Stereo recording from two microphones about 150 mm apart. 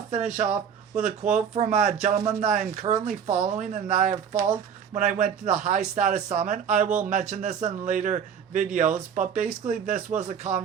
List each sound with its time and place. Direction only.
0.1 s speech: 55° right (ahead or behind)